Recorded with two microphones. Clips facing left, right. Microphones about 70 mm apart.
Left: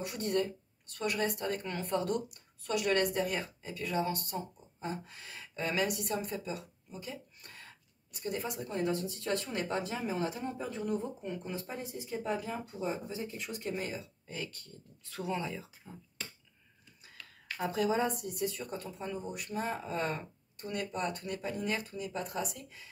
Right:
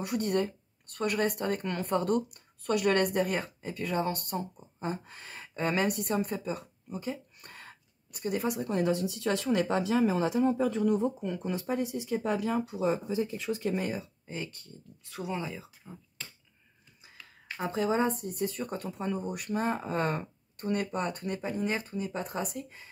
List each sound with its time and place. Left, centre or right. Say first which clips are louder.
0.0 s speech: right 3 dB; right
13.7 s speech: right 5 dB; right
14.2 s speech: right 3 dB; right; by 16.0 s centre
17.6 s speech: right 2 dB; right
21.4 s speech: right 3 dB; right